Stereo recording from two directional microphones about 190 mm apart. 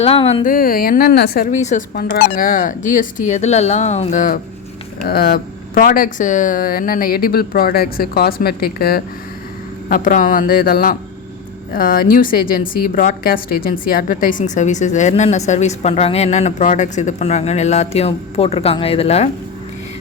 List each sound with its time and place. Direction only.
0.0 s a woman's voice: 30° left (ahead or behind)
0.4 s a woman's voice: 50° left (ahead or behind); by 19.3 s 35° left (ahead or behind)